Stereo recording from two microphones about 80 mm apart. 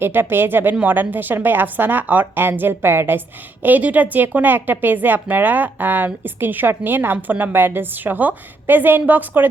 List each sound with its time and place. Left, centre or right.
0.0 s a woman's voice: right